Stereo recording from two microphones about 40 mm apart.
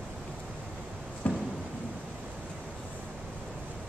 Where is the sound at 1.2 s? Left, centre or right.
Left.